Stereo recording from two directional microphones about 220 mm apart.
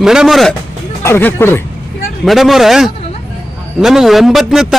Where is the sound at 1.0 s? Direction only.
10° left (ahead or behind).